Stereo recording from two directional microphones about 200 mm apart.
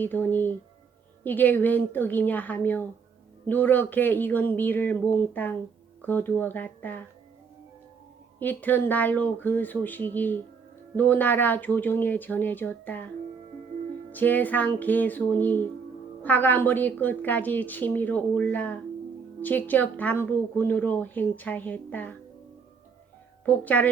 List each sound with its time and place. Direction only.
0.0 s a woman's voice: 10° left (ahead or behind)
8.4 s a woman's voice: 10° left (ahead or behind)
14.1 s a woman's voice: 10° left (ahead or behind)
23.5 s a woman's voice: 10° left (ahead or behind)